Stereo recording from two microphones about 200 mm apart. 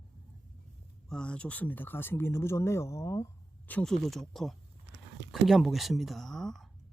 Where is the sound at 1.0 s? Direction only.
5° left (ahead or behind).